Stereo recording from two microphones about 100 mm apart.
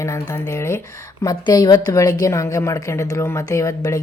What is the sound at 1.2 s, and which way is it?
A woman's voice, 40° left (ahead or behind).